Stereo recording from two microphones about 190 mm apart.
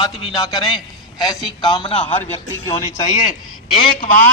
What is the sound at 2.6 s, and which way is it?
Speech, 15° left (ahead or behind).